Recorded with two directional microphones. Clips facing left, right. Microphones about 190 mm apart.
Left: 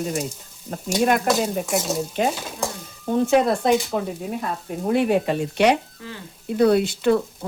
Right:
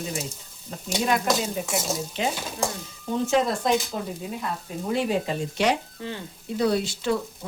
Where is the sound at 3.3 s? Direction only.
60° left (ahead or behind).